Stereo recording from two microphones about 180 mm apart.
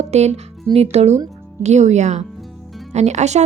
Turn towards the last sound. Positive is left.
turn(degrees=-40)  # may be behind; listen again after turning